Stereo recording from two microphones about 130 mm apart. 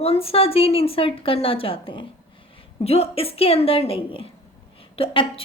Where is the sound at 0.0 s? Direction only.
50° left (ahead or behind).